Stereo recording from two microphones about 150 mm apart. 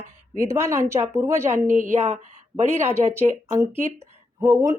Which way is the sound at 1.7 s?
60° right (ahead or behind).